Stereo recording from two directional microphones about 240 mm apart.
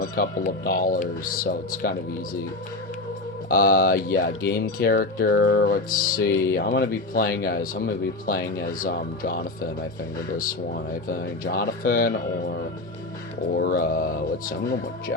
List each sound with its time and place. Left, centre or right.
0.0 s speech: left
3.5 s speech: left